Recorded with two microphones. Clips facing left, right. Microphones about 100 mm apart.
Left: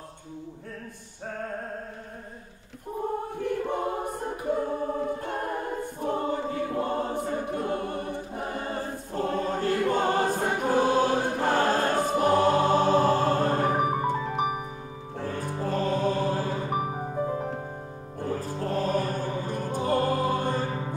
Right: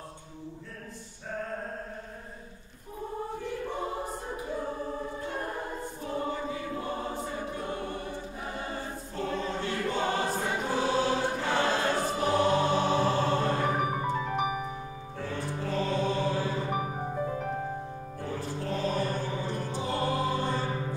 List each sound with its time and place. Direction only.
3.4 s choir: 55° left (ahead or behind)
5.9 s choir: 50° left (ahead or behind)
15.1 s music: 45° left (ahead or behind)
17.1 s music: 20° left (ahead or behind)
18.2 s music: 45° left (ahead or behind)